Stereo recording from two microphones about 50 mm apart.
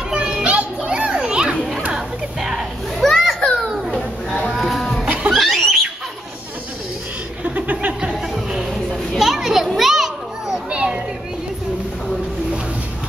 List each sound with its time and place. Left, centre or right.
0.1 s children playing: centre
1.9 s music: centre
3.3 s children playing: centre
4.6 s livestock: centre
5.0 s music: right
5.3 s a sound: centre
7.4 s a sound: right
8.0 s music: centre
8.7 s children playing: centre
10.7 s children playing: right